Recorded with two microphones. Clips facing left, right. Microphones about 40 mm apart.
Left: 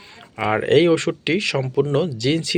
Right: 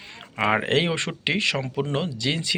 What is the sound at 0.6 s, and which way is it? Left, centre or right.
Speech, right.